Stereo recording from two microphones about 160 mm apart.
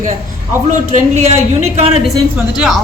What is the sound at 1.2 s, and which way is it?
Speech, 45° right (ahead or behind).